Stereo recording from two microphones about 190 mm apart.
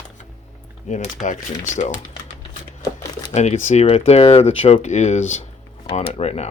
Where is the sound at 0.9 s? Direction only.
40° left (ahead or behind).